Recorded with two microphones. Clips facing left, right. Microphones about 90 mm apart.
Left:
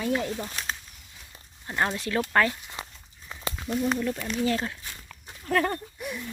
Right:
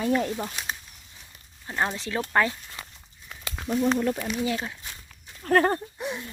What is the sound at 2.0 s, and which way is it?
Speech, 20° right (ahead or behind).